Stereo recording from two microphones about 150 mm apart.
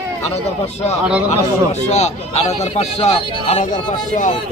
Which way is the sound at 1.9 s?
45° left (ahead or behind).